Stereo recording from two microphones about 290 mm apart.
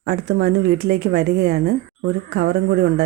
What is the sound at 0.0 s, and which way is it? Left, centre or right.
Speech, right.